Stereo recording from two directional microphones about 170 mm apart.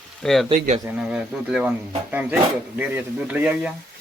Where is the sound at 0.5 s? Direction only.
50° right (ahead or behind).